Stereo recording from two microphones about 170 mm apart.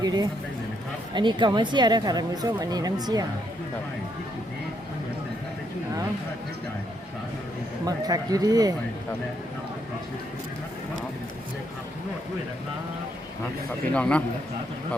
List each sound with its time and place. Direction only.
0.0 s a woman's voice: 25° right (ahead or behind)
7.9 s a woman's voice: 20° right (ahead or behind)
13.9 s a man's voice: 5° left (ahead or behind)